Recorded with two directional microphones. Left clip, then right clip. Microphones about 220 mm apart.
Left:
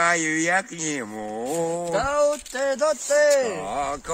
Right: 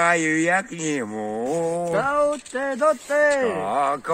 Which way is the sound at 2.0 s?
50° left (ahead or behind).